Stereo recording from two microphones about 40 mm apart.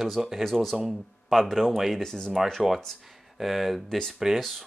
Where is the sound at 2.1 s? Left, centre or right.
Centre.